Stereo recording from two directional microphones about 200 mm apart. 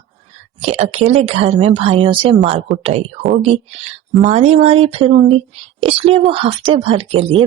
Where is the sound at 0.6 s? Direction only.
30° right (ahead or behind).